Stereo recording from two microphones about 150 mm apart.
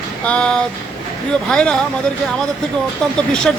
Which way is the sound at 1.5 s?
5° left (ahead or behind).